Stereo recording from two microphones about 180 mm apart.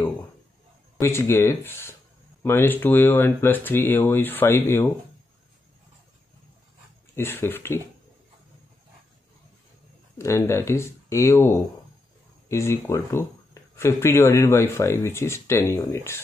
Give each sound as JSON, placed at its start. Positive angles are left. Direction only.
{"t": 0.9, "sound": "speech", "side_deg": 15}
{"t": 7.2, "sound": "speech", "side_deg": 10}
{"t": 10.1, "sound": "speech", "side_deg": 15}